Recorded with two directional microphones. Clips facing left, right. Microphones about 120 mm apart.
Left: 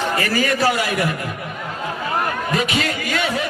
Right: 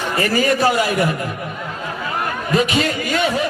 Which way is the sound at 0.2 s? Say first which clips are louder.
Right 6 dB; 30° right (ahead or behind).